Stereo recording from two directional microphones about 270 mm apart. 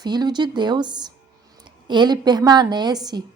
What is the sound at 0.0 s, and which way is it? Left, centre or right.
A woman's voice, centre.